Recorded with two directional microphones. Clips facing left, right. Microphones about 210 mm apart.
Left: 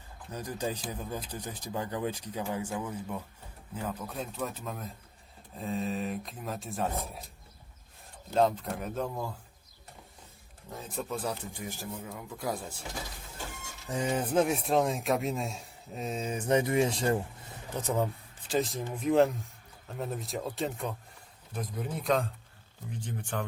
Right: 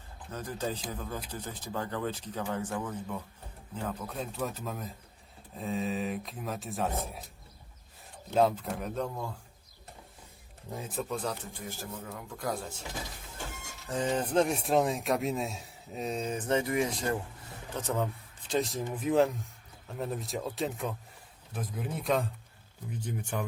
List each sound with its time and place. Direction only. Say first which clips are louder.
0.3 s speech: left 1 dB; 15° left (ahead or behind)
8.3 s speech: even; 5° right (ahead or behind)
10.7 s speech: right 1 dB; 10° right (ahead or behind); by 12.5 s 5° left (ahead or behind)
13.8 s speech: even; 10° left (ahead or behind)
16.5 s speech: left 3 dB; 20° left (ahead or behind)
17.7 s speech: left 2 dB; 10° left (ahead or behind); by 23.4 s 10° right (ahead or behind)